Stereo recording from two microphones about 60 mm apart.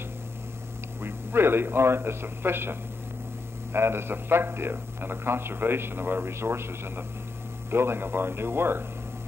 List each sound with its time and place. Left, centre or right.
1.0 s speech: right